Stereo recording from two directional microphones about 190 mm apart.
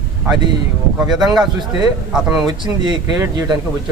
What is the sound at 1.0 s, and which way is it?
Speech, centre (ahead or behind).